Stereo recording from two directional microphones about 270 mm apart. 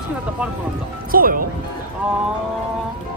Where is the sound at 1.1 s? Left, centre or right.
Right.